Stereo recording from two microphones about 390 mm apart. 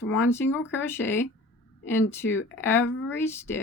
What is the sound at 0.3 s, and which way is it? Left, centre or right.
Speech, centre.